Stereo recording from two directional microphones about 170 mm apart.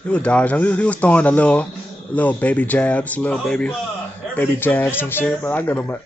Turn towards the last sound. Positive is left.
turn(degrees=10)  # may be behind; listen again after turning